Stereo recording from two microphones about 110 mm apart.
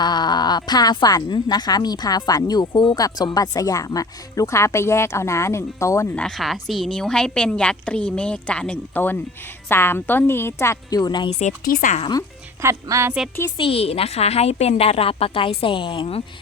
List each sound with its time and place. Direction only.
0.0 s speech: 40° left (ahead or behind)
6.1 s a woman's voice: 5° left (ahead or behind); by 11.3 s 40° left (ahead or behind)
11.3 s speech: 90° left
12.6 s speech: 25° right (ahead or behind)
13.6 s a woman's voice: 60° left (ahead or behind)